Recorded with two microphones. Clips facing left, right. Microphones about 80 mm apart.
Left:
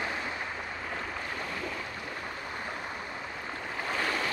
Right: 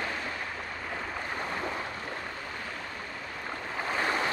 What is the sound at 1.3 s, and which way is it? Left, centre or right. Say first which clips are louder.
Boat: right 3 dB; right.